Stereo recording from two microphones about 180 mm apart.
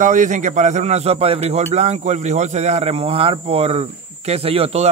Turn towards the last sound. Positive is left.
turn(degrees=-35)  # may be behind; listen again after turning